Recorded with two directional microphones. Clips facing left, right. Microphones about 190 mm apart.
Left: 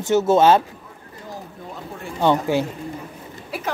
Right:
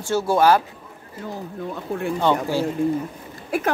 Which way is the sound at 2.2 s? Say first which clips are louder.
Left 4 dB; 15° left (ahead or behind).